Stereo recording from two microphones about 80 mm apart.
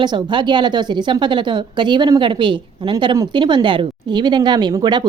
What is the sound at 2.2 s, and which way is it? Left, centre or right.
A woman's voice, right.